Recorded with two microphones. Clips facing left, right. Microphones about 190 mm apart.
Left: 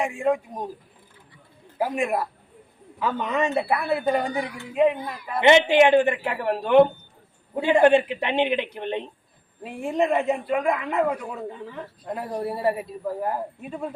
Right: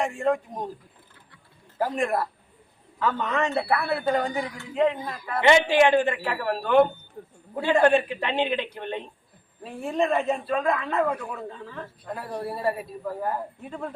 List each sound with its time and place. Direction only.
0.0 s a man's voice: 10° left (ahead or behind)
1.8 s a man's voice: 10° left (ahead or behind)